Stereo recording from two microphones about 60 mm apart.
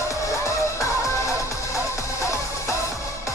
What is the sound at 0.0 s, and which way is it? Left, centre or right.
Music, left.